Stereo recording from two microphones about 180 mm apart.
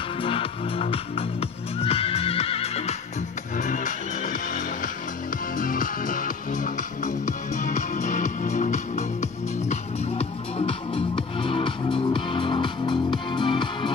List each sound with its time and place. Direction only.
0.2 s music: 30° left (ahead or behind)